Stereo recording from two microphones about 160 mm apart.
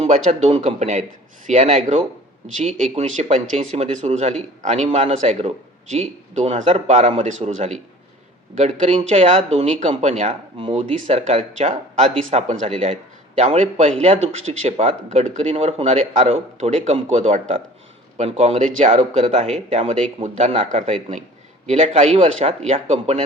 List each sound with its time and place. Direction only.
0.0 s speech: 40° right (ahead or behind)
10.6 s speech: 35° right (ahead or behind)